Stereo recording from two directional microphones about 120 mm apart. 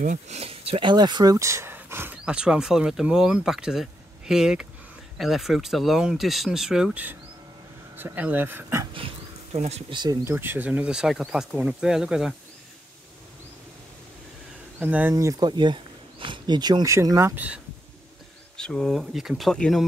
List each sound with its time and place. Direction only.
0.0 s speech: 90° right
0.4 s speech: 55° right (ahead or behind); by 8.8 s 20° right (ahead or behind)
8.9 s bee: 50° right (ahead or behind)
9.8 s speech: 40° right (ahead or behind)
10.2 s speech: 15° right (ahead or behind)
14.8 s speech: 10° right (ahead or behind)
15.1 s speech: 30° right (ahead or behind)
18.6 s speech: 5° left (ahead or behind)